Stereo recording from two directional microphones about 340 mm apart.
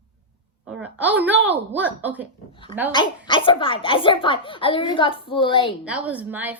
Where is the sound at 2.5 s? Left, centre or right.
Centre.